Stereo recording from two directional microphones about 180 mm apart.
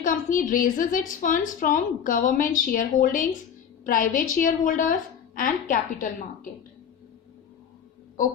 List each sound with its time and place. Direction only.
0.0 s a woman's voice: 50° left (ahead or behind)